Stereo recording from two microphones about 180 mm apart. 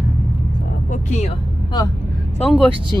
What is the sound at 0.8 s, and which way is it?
Vehicle, 45° left (ahead or behind).